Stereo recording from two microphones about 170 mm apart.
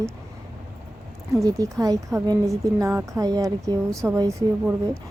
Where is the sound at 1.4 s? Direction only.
20° right (ahead or behind).